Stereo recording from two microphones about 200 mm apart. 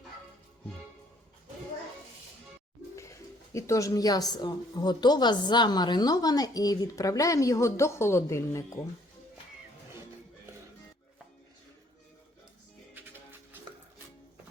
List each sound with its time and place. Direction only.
2.9 s speech: 15° left (ahead or behind)